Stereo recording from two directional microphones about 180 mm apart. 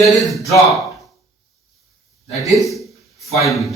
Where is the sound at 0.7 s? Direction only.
Centre (ahead or behind).